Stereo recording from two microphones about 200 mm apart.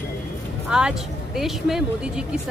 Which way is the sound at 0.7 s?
5° right (ahead or behind).